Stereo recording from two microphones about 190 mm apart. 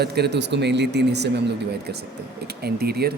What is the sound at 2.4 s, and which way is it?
Speech, 55° right (ahead or behind).